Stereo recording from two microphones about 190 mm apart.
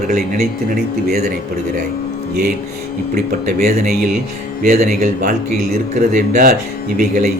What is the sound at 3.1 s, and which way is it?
Speech, 40° right (ahead or behind).